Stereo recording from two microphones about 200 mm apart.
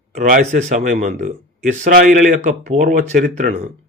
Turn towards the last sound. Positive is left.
turn(degrees=-35)  # may be behind; listen again after turning